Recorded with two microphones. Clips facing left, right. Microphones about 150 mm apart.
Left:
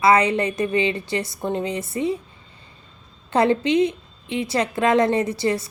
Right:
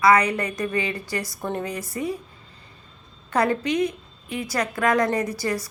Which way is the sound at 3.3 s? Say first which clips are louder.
Left 4 dB; 25° left (ahead or behind).